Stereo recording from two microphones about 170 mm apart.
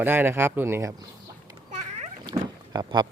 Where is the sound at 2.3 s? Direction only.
25° right (ahead or behind).